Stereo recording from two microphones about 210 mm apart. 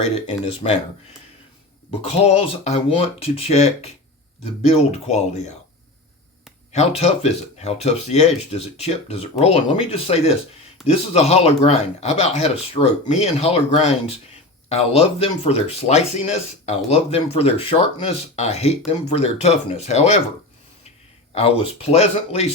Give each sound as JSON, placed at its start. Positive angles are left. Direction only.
{"t": 0.6, "sound": "speech", "side_deg": 25}
{"t": 1.9, "sound": "speech", "side_deg": 30}
{"t": 6.7, "sound": "speech", "side_deg": 30}
{"t": 21.3, "sound": "speech", "side_deg": 30}